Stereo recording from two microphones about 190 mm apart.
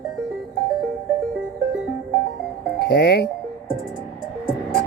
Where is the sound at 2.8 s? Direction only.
60° left (ahead or behind).